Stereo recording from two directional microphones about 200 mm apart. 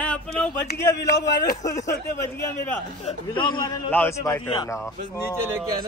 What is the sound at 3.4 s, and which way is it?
Speech, 20° left (ahead or behind).